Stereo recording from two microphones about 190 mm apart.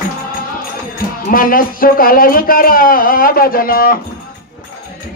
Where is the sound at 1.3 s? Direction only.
50° left (ahead or behind).